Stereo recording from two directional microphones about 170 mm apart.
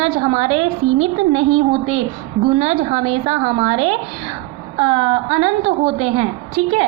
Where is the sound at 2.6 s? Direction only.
40° right (ahead or behind).